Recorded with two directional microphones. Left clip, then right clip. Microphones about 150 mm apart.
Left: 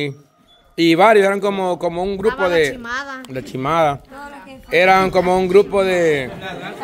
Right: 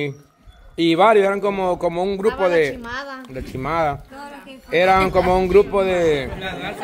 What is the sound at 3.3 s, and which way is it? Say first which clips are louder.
Speech: left 5 dB; 40° left (ahead or behind).